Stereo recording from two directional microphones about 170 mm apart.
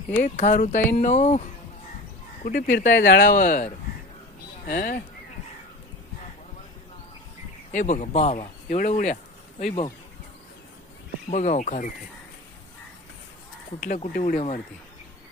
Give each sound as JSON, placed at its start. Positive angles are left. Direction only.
{"t": 0.2, "sound": "speech", "side_deg": 45}
{"t": 2.9, "sound": "speech", "side_deg": 90}
{"t": 3.2, "sound": "speech", "side_deg": 50}
{"t": 7.7, "sound": "speech", "side_deg": 50}
{"t": 9.6, "sound": "speech", "side_deg": 35}
{"t": 11.3, "sound": "speech", "side_deg": 45}
{"t": 13.8, "sound": "speech", "side_deg": 45}